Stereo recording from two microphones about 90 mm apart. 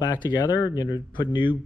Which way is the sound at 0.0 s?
55° left (ahead or behind).